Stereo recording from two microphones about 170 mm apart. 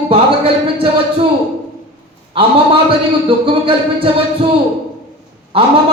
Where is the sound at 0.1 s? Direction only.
30° right (ahead or behind).